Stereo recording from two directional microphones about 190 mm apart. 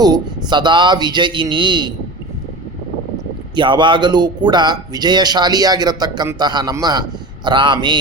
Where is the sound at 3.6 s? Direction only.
25° right (ahead or behind).